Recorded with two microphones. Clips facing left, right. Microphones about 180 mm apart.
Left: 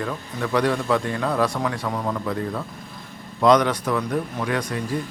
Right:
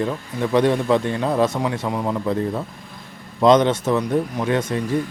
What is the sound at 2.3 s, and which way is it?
Speech, 25° right (ahead or behind).